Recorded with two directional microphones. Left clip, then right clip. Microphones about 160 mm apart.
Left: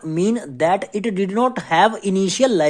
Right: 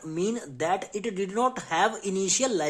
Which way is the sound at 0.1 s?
25° left (ahead or behind).